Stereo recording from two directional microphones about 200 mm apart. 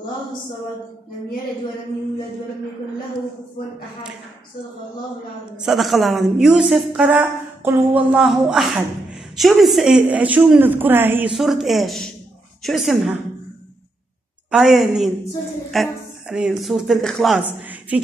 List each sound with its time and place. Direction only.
5.6 s speech: centre (ahead or behind)
14.5 s speech: centre (ahead or behind)
17.6 s a sound: 10° right (ahead or behind)